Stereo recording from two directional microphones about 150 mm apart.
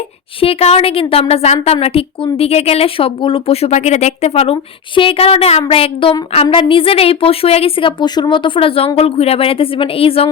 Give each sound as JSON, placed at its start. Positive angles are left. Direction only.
{"t": 0.3, "sound": "a woman's voice", "side_deg": 40}